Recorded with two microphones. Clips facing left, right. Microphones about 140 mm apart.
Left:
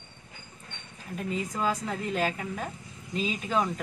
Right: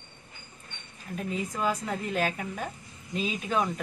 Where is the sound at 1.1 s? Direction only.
5° right (ahead or behind).